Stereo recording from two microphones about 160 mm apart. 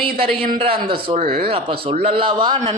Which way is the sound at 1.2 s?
65° right (ahead or behind).